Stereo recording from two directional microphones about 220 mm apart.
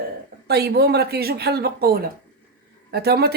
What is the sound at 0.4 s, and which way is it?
Speech, 45° right (ahead or behind).